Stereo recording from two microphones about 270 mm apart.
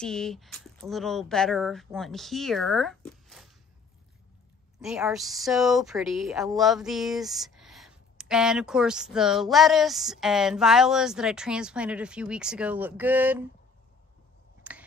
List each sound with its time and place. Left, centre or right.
0.0 s speech: centre
3.1 s a sound: centre
4.8 s speech: centre
14.7 s finger snapping: centre